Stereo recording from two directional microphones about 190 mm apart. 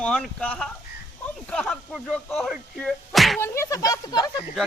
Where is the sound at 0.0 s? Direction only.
5° left (ahead or behind).